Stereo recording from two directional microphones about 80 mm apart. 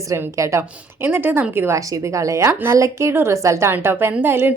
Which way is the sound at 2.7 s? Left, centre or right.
Right.